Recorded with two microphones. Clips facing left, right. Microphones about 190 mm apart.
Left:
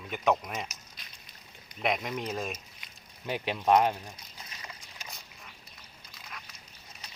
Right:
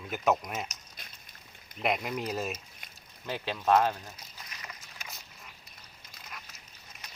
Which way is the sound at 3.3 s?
15° left (ahead or behind).